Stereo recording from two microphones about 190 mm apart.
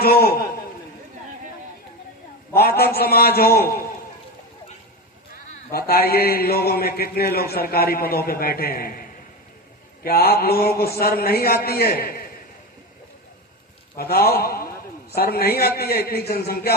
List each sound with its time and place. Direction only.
0.0 s a man's voice: 55° left (ahead or behind)
2.6 s a man's voice: 55° left (ahead or behind)
5.7 s a man's voice: 55° left (ahead or behind)
13.9 s a man's voice: 55° left (ahead or behind)